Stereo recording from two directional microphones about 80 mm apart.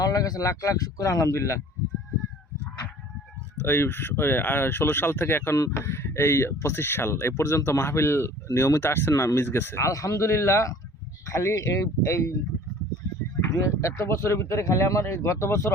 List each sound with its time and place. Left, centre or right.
0.0 s speech: left
3.6 s speech: left
13.4 s speech: left